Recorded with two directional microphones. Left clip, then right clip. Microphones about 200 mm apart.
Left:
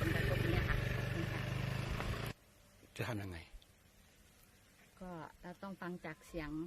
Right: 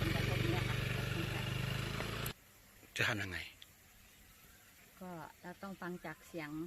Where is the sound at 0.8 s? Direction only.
45° right (ahead or behind).